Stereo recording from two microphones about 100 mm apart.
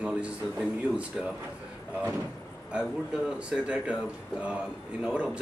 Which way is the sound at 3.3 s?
10° right (ahead or behind).